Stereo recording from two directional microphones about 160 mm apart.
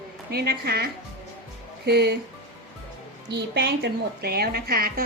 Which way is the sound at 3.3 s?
90° right.